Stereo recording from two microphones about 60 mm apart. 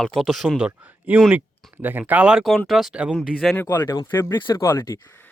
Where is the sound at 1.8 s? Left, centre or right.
Right.